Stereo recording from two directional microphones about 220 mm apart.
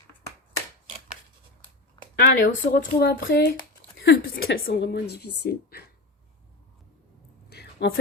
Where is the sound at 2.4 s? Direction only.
40° left (ahead or behind).